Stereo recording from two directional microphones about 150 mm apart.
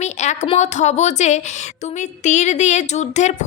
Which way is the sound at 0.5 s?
50° left (ahead or behind).